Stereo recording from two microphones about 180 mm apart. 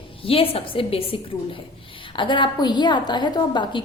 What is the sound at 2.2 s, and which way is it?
A woman's voice, 25° left (ahead or behind).